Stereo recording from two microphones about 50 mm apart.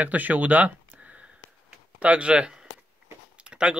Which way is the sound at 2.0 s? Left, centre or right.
Right.